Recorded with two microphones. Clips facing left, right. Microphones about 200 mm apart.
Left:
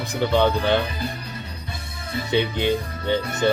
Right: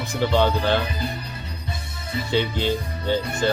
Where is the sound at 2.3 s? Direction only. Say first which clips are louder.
Left 2 dB; 15° left (ahead or behind).